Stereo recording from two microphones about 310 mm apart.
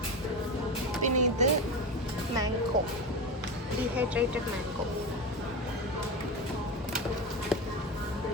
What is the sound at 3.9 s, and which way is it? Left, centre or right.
Speech, centre.